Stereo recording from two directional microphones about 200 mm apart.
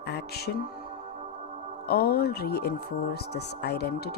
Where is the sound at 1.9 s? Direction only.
50° left (ahead or behind).